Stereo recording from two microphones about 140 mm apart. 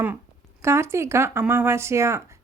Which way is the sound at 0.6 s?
20° right (ahead or behind).